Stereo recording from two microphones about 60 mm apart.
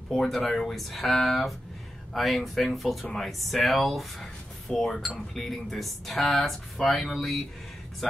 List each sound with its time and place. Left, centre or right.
0.1 s speech: centre